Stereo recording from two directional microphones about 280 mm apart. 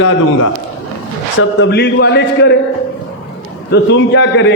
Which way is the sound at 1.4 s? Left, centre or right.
Left.